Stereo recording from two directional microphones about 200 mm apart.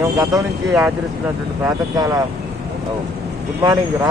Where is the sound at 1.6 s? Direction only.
20° right (ahead or behind).